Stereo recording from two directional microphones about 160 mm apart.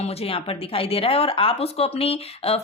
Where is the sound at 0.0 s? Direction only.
40° left (ahead or behind).